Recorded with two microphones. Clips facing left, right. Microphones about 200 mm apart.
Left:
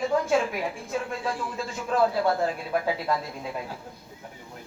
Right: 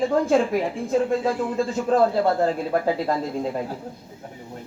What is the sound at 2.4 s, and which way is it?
Speech, 35° right (ahead or behind).